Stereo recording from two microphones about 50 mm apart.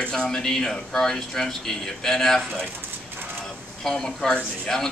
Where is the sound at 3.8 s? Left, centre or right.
Centre.